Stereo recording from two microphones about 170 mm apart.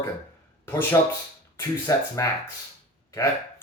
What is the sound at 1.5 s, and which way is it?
Speech, 20° left (ahead or behind).